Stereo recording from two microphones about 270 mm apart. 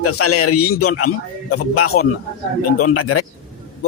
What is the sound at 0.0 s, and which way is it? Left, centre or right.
A man's voice, left.